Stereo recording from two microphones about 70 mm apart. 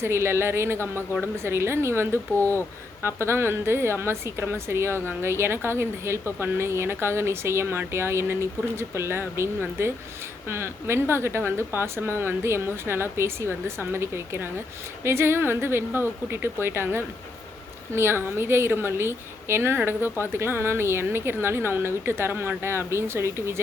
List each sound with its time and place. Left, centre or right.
0.0 s a woman's voice: right